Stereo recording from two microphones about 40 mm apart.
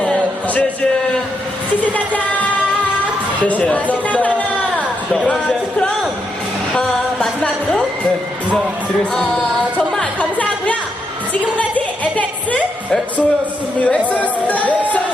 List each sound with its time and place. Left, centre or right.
0.0 s music: left
3.4 s speech: left
6.7 s music: left
10.2 s music: left
13.7 s speech: left
14.1 s music: left